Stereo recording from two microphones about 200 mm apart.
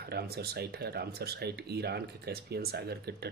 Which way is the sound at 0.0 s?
50° right (ahead or behind).